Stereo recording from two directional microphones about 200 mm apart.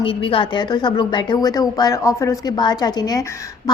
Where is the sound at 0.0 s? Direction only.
25° left (ahead or behind).